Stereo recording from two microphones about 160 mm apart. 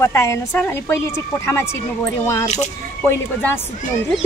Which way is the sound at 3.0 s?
15° left (ahead or behind).